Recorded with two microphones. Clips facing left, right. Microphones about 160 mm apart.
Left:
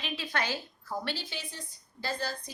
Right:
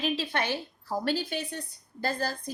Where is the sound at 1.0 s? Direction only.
55° right (ahead or behind).